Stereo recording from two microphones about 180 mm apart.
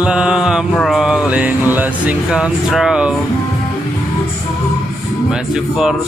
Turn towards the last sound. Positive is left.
turn(degrees=-5)  # may be behind; listen again after turning